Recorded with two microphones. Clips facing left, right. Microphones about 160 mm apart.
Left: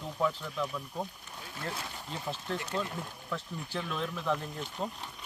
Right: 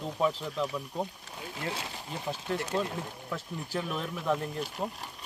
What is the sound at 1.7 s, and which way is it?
Speech, 20° right (ahead or behind).